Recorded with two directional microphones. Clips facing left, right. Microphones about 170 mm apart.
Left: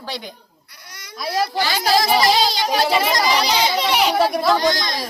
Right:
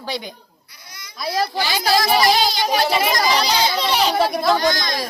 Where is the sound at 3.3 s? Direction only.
15° left (ahead or behind).